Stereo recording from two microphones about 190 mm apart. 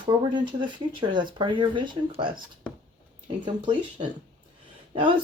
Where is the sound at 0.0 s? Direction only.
25° right (ahead or behind).